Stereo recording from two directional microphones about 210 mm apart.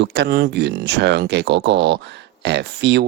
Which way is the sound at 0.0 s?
55° right (ahead or behind).